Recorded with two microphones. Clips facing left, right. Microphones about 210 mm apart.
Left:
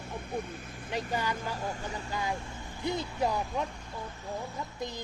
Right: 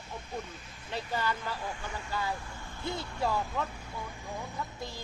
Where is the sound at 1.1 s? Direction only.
15° left (ahead or behind).